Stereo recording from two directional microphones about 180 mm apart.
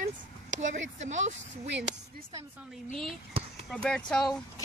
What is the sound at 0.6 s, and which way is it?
Speech, 40° right (ahead or behind).